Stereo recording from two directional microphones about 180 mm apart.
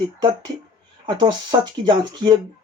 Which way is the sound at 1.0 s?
25° right (ahead or behind).